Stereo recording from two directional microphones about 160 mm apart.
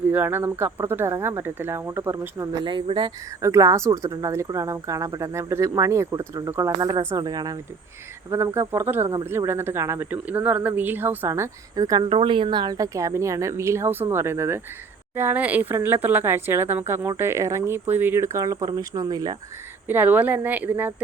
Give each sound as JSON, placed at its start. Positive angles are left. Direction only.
{"t": 0.1, "sound": "speech", "side_deg": -15}
{"t": 3.4, "sound": "speech", "side_deg": -20}
{"t": 19.9, "sound": "speech", "side_deg": -10}